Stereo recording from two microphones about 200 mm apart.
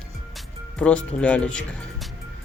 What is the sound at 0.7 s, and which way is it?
Speech, 5° left (ahead or behind).